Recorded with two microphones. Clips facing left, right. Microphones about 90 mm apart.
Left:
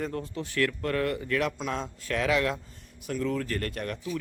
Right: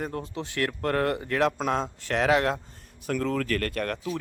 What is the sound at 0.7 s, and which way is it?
Speech, 45° right (ahead or behind).